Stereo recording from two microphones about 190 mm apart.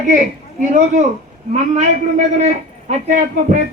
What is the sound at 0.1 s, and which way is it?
A man's voice, 40° right (ahead or behind).